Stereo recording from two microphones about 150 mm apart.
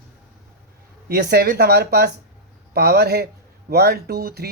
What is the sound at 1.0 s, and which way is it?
Speech, 90° right.